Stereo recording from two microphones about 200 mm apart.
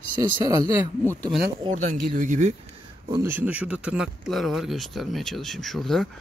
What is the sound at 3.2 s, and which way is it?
Speech, 10° right (ahead or behind).